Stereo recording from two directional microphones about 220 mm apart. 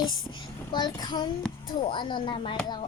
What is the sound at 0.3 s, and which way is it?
A child's voice, 20° left (ahead or behind).